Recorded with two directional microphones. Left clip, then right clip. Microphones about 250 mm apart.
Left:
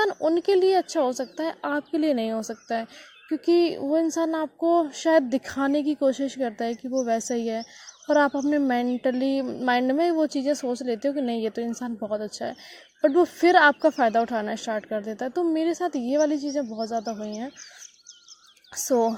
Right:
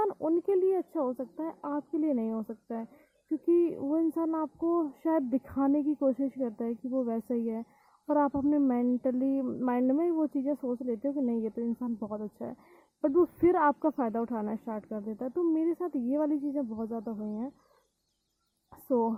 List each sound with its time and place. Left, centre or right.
0.0 s a woman's voice: centre
1.0 s a woman's voice: left; by 16.8 s centre
16.8 s a woman's voice: centre
18.9 s speech: left